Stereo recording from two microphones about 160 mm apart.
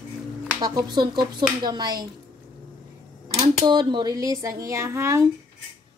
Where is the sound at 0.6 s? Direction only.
25° right (ahead or behind).